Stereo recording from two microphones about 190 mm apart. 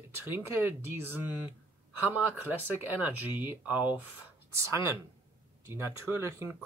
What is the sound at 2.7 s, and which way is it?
Speech, 10° right (ahead or behind).